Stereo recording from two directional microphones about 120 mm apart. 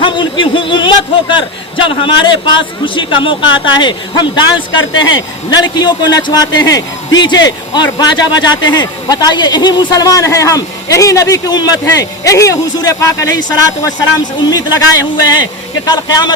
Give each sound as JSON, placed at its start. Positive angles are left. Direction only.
{"t": 0.0, "sound": "a man's voice", "side_deg": 45}